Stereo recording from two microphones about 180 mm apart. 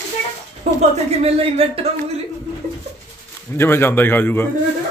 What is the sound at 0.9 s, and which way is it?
Speech, 35° right (ahead or behind).